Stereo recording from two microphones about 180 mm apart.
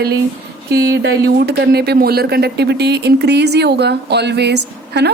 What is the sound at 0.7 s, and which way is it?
Speech, 60° right (ahead or behind).